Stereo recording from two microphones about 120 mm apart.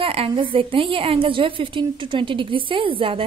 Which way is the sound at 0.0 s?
50° right (ahead or behind).